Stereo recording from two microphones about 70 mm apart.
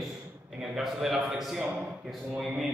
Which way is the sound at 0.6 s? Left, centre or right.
Centre.